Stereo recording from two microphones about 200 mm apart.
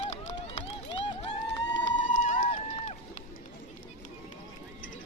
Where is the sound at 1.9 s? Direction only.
40° left (ahead or behind).